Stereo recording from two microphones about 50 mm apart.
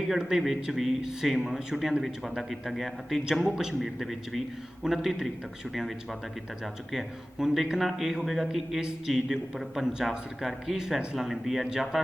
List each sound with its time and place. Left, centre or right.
0.3 s a man's voice: centre